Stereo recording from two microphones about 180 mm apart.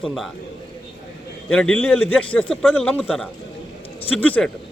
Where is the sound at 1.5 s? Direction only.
5° left (ahead or behind).